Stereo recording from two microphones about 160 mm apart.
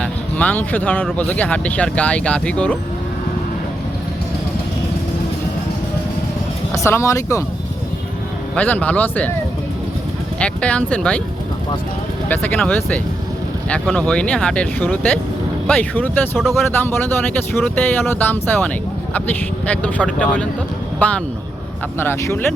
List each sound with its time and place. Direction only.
0.0 s speech: 10° left (ahead or behind)
6.7 s speech: 15° left (ahead or behind)
8.5 s speech: 10° left (ahead or behind)
10.4 s speech: 5° left (ahead or behind)
12.3 s speech: 10° left (ahead or behind)